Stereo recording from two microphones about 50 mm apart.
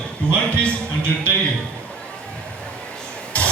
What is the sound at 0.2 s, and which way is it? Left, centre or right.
Speech, left.